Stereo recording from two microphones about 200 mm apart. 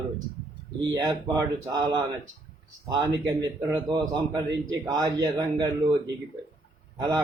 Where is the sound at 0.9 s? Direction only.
20° right (ahead or behind).